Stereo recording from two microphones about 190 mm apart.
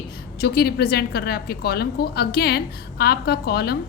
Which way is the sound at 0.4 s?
55° left (ahead or behind).